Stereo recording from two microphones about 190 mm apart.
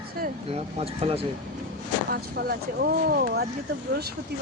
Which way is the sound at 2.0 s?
55° right (ahead or behind).